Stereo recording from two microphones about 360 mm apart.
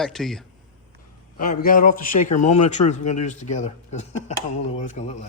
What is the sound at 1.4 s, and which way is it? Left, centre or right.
A man's voice, left.